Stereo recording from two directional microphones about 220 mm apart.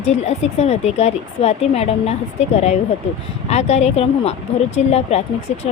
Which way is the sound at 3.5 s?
30° left (ahead or behind).